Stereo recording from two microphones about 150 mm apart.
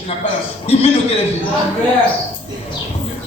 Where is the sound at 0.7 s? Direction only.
45° left (ahead or behind).